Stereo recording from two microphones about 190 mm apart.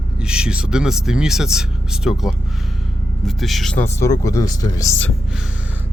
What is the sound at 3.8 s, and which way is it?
Speech, 15° left (ahead or behind).